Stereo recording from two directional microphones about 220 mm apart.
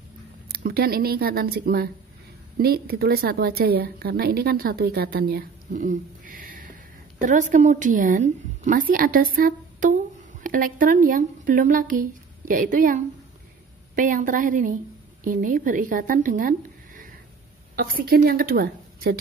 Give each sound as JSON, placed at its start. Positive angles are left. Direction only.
{"t": 0.5, "sound": "a woman's voice", "side_deg": -45}